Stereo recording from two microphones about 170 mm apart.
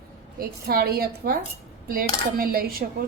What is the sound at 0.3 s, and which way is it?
A woman's voice, 65° right (ahead or behind).